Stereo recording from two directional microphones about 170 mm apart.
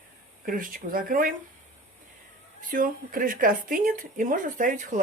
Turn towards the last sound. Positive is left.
turn(degrees=-50)  # may be behind; listen again after turning